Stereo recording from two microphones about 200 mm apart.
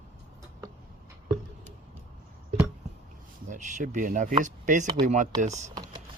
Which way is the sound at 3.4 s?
40° right (ahead or behind).